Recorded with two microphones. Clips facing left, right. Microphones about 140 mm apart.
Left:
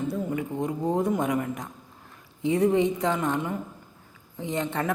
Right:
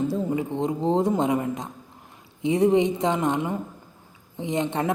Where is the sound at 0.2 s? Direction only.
25° right (ahead or behind).